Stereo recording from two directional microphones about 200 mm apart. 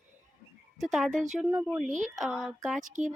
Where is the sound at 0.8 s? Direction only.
Centre (ahead or behind).